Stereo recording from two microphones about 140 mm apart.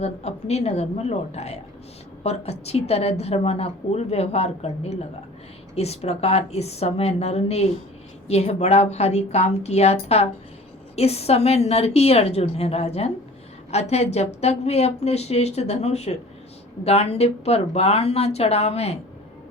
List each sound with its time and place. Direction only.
0.0 s a woman's voice: 50° left (ahead or behind)